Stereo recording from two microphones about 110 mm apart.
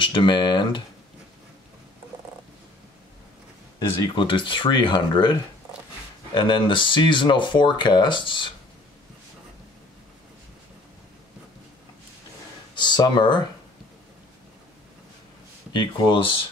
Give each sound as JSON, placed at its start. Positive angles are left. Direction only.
{"t": 0.0, "sound": "speech", "side_deg": 50}
{"t": 4.1, "sound": "speech", "side_deg": 50}
{"t": 12.7, "sound": "speech", "side_deg": 40}
{"t": 15.7, "sound": "speech", "side_deg": 45}